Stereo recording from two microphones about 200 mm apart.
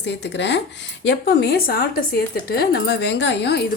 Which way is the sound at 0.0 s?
60° left (ahead or behind).